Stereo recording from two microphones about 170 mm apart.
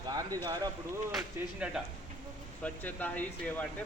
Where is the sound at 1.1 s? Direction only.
5° right (ahead or behind).